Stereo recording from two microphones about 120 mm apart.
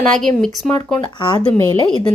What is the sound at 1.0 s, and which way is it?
Speech, 40° left (ahead or behind).